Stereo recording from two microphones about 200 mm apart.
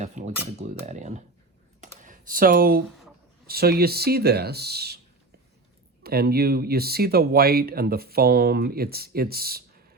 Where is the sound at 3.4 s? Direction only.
50° right (ahead or behind).